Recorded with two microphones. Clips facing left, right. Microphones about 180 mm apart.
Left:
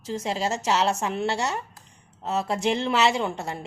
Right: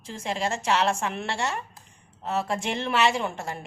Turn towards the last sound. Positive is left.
turn(degrees=20)  # may be behind; listen again after turning